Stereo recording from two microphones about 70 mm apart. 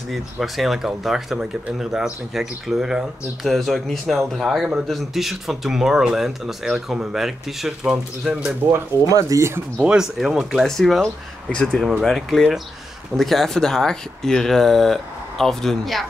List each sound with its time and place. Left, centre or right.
0.1 s speech: centre
3.4 s speech: centre
9.1 s speech: right
9.8 s speech: centre
10.1 s speech: centre